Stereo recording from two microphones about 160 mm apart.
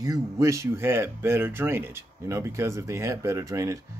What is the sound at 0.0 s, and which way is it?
Speech, 20° right (ahead or behind).